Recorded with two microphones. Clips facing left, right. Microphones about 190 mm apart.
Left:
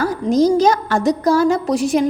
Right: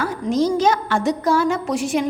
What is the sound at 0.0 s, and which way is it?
A woman's voice, 40° left (ahead or behind).